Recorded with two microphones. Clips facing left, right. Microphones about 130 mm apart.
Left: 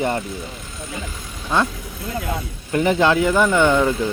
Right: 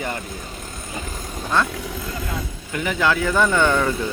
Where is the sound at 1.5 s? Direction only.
15° left (ahead or behind).